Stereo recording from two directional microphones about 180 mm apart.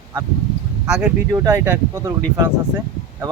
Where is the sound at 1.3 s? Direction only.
15° right (ahead or behind).